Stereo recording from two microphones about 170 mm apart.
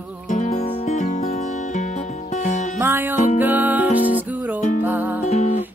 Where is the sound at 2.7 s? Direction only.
15° right (ahead or behind).